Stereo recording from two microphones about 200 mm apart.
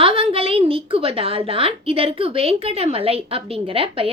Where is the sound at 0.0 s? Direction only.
25° right (ahead or behind).